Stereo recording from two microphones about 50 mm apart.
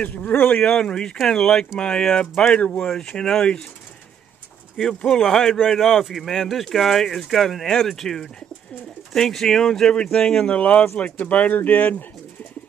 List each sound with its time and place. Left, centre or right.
0.0 s speech: left
0.8 s speech: centre
2.6 s speech: left
2.9 s speech: centre
5.0 s speech: centre
10.6 s speech: left